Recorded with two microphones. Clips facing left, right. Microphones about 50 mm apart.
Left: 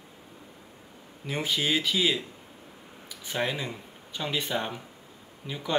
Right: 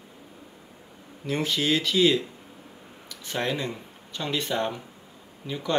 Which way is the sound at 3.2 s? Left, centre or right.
Centre.